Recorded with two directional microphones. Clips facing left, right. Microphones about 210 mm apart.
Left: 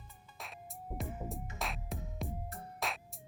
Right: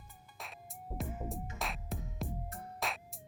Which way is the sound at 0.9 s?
Centre (ahead or behind).